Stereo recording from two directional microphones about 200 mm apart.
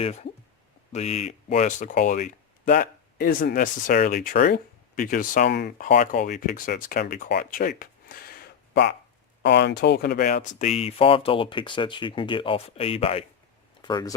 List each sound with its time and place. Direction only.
0.0 s speech: 35° left (ahead or behind)
7.8 s a sound: 50° left (ahead or behind)
9.4 s speech: 60° left (ahead or behind); by 14.1 s 20° left (ahead or behind)